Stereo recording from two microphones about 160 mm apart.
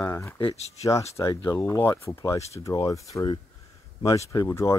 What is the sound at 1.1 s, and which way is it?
Speech, 20° left (ahead or behind).